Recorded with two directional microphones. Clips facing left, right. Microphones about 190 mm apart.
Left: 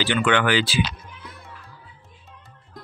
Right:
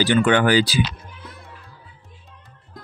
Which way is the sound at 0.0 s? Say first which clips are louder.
Right 4 dB; 40° right (ahead or behind).